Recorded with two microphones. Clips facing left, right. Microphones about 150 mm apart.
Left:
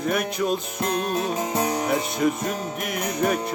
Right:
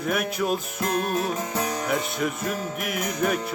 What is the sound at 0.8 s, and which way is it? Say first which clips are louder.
Music: even; 30° left (ahead or behind).